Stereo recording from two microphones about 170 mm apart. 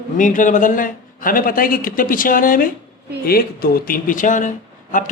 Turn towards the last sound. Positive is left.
turn(degrees=50)  # may be behind; listen again after turning